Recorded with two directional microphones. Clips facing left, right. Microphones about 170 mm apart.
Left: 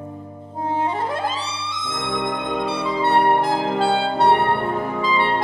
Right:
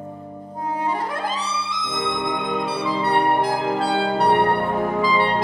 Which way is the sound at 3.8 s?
25° left (ahead or behind).